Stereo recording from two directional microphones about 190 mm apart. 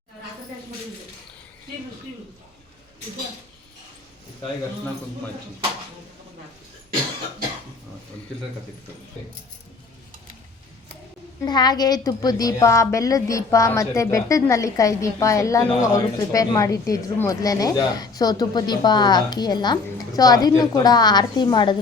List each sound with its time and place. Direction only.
11.4 s a woman's voice: 20° left (ahead or behind)